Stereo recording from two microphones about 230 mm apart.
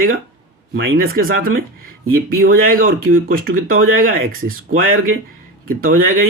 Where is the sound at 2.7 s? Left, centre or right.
Right.